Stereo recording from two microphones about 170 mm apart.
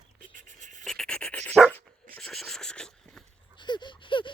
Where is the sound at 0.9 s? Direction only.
5° left (ahead or behind).